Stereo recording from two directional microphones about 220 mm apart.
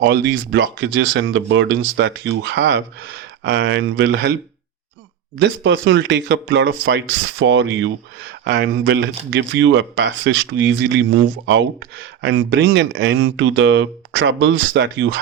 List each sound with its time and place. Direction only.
0.0 s speech: 50° right (ahead or behind)
5.4 s speech: 60° right (ahead or behind)